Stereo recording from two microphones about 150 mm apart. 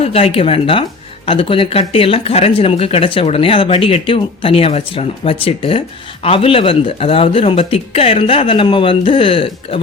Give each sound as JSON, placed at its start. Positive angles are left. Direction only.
{"t": 0.0, "sound": "speech", "side_deg": 40}